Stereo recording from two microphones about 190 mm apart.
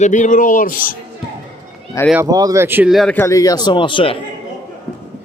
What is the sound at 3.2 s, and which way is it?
Speech, 15° left (ahead or behind).